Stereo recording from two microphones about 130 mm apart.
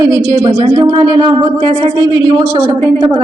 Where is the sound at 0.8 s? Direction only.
35° right (ahead or behind).